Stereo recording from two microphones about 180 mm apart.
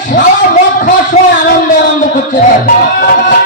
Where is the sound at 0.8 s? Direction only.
50° left (ahead or behind).